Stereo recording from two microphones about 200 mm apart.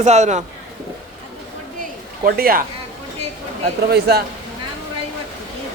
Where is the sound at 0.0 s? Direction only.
35° right (ahead or behind).